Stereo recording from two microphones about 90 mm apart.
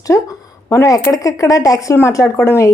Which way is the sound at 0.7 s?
35° left (ahead or behind).